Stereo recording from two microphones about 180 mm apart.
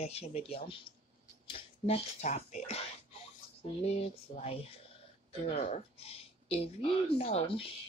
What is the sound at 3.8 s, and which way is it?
Speech, 35° left (ahead or behind).